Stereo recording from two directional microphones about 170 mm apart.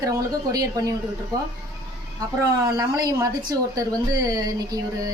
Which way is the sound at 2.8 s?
20° right (ahead or behind).